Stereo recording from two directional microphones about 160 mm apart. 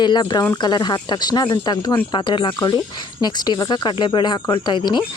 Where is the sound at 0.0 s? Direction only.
25° left (ahead or behind).